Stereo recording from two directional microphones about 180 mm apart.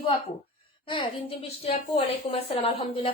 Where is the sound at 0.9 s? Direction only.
30° left (ahead or behind).